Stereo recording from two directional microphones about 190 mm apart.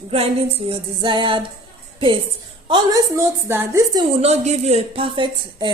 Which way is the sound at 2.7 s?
20° right (ahead or behind).